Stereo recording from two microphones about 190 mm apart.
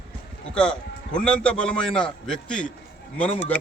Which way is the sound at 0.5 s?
5° left (ahead or behind).